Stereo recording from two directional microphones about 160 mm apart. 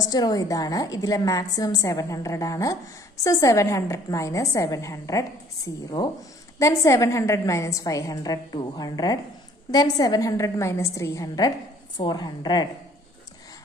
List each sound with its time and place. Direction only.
0.1 s a woman's voice: 25° left (ahead or behind)
6.6 s a woman's voice: 20° left (ahead or behind)